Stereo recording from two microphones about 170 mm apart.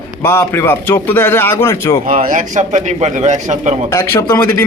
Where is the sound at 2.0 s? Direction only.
55° right (ahead or behind).